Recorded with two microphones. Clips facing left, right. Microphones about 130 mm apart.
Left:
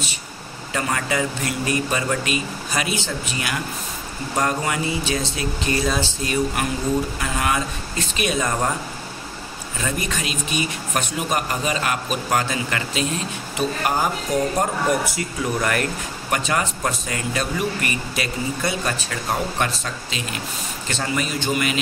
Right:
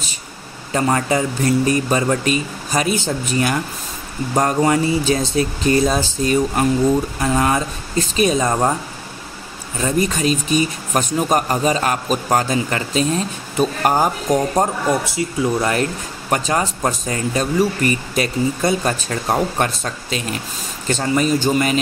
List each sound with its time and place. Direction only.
0.7 s speech: 35° right (ahead or behind)
9.8 s speech: 35° right (ahead or behind)
14.6 s speech: 25° right (ahead or behind)